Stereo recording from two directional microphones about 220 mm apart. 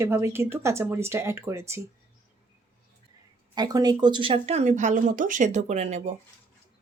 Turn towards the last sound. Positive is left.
turn(degrees=-30)  # may be behind; listen again after turning